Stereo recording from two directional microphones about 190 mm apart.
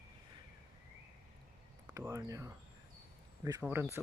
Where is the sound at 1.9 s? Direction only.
15° right (ahead or behind).